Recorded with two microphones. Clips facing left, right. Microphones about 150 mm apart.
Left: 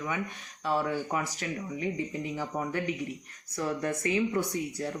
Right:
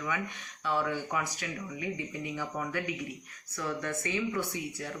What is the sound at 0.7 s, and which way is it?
Speech, 35° left (ahead or behind).